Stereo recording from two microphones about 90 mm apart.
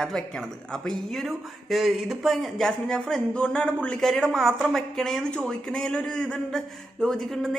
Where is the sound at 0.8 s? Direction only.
Centre (ahead or behind).